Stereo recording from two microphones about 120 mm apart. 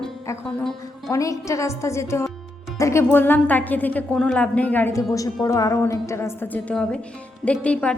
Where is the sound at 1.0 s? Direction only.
25° left (ahead or behind).